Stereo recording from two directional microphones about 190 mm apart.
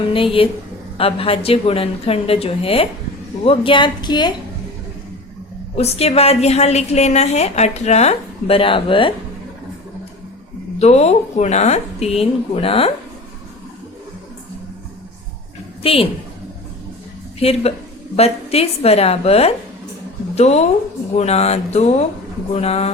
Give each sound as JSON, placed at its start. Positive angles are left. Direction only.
{"t": 0.1, "sound": "a woman's voice", "side_deg": 30}
{"t": 5.7, "sound": "a woman's voice", "side_deg": 35}
{"t": 10.8, "sound": "a woman's voice", "side_deg": 35}
{"t": 15.8, "sound": "a woman's voice", "side_deg": 30}
{"t": 17.4, "sound": "a woman's voice", "side_deg": 30}